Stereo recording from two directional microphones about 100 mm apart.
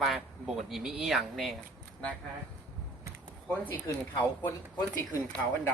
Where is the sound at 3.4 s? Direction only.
15° left (ahead or behind).